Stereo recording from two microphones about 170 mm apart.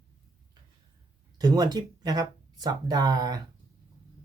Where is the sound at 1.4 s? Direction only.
20° right (ahead or behind).